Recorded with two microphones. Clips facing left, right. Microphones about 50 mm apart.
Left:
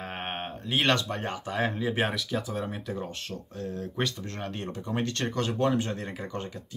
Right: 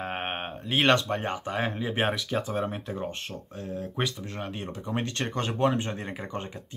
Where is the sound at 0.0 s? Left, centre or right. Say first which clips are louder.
Right 3 dB; centre.